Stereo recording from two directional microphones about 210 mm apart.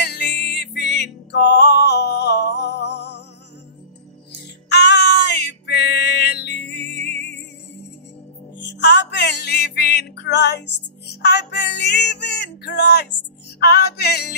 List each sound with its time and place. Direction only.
0.0 s music: 55° left (ahead or behind)
4.6 s music: 50° left (ahead or behind)